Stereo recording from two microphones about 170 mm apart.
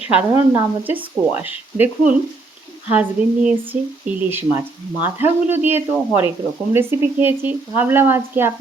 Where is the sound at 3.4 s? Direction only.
10° right (ahead or behind).